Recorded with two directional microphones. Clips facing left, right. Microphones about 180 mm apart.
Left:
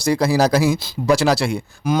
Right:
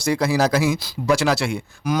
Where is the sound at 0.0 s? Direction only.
35° left (ahead or behind).